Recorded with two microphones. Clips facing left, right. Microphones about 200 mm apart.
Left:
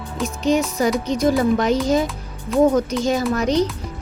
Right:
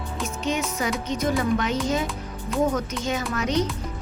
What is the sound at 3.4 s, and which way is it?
Music, 35° left (ahead or behind).